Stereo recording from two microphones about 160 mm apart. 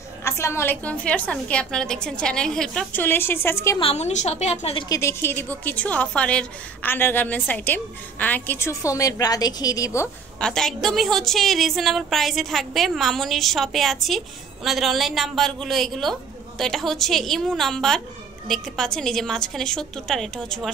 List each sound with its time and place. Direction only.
0.2 s a woman's voice: 15° left (ahead or behind)
3.8 s a woman's voice: 45° left (ahead or behind)
4.8 s a woman's voice: 20° left (ahead or behind)
10.4 s a woman's voice: 5° left (ahead or behind)